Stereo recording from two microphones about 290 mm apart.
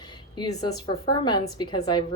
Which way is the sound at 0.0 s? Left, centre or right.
Centre.